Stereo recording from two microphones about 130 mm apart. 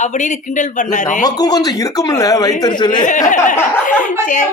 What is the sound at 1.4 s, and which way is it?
A man's voice, 30° left (ahead or behind).